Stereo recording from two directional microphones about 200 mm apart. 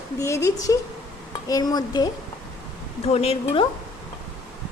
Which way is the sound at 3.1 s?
30° left (ahead or behind).